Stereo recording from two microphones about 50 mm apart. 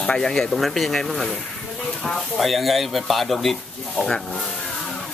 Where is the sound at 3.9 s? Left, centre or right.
Centre.